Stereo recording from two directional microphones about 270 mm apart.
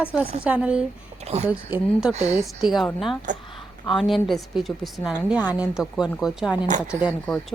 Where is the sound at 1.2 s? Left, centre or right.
Right.